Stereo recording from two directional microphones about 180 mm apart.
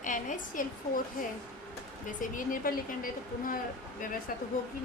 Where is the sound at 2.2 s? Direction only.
50° left (ahead or behind).